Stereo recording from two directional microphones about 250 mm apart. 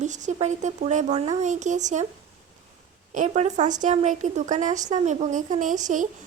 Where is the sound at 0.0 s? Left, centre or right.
Right.